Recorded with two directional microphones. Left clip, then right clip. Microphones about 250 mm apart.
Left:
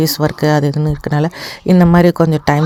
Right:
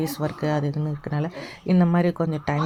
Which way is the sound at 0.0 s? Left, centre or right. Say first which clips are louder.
Left 12 dB; left.